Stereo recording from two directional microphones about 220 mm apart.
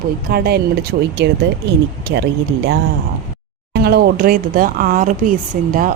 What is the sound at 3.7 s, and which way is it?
Speech, 45° right (ahead or behind).